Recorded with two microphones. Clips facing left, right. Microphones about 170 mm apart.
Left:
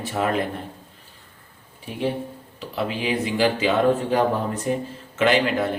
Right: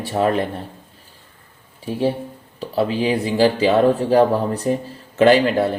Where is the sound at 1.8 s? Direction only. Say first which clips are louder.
Right 5 dB; 35° right (ahead or behind).